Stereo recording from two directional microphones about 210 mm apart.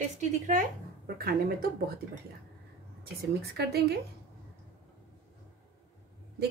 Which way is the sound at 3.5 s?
50° right (ahead or behind).